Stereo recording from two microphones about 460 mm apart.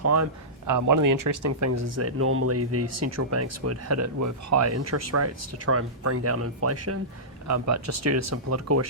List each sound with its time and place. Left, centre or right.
0.0 s speech: right